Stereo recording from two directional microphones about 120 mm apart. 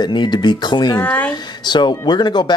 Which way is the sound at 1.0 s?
15° left (ahead or behind).